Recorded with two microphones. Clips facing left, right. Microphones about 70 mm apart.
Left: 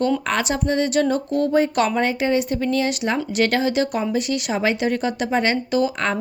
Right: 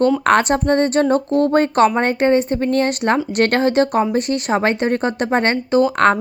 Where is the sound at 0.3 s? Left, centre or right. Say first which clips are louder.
Right 7 dB; right.